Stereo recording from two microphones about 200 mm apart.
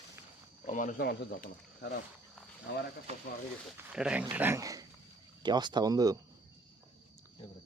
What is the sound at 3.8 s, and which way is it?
A man's voice, 5° right (ahead or behind).